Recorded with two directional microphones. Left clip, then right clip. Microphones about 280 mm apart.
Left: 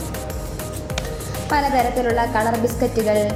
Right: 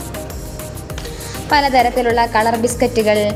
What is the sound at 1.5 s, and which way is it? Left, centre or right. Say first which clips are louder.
A woman's voice: right 6 dB; centre.